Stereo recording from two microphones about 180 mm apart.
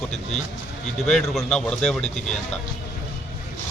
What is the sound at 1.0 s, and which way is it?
A man's voice, centre (ahead or behind).